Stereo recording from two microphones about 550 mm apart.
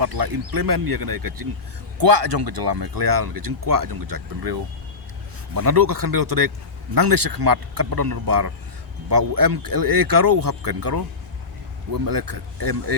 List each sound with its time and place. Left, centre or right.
0.0 s speech: right